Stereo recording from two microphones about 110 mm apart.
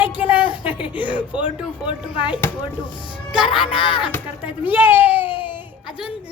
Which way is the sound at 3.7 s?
50° left (ahead or behind).